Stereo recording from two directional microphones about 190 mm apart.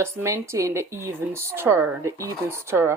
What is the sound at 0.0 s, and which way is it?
A woman's voice, 15° right (ahead or behind).